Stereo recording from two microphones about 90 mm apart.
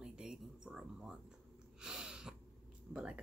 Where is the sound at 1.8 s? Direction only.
10° right (ahead or behind).